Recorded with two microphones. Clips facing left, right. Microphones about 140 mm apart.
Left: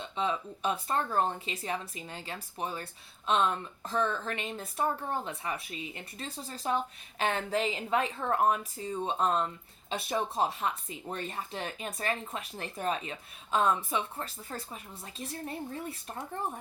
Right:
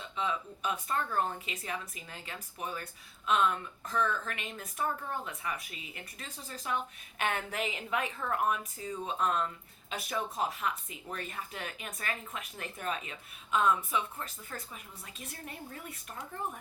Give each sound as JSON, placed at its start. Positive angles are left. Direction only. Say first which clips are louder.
{"t": 0.0, "sound": "speech", "louder": "left 3 dB", "side_deg": 30}